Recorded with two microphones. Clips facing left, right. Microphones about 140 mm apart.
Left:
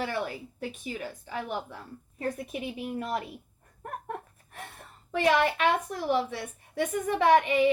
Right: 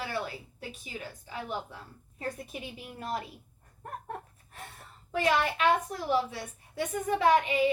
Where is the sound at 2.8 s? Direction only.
55° left (ahead or behind).